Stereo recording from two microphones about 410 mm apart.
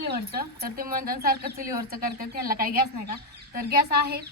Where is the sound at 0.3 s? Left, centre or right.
Right.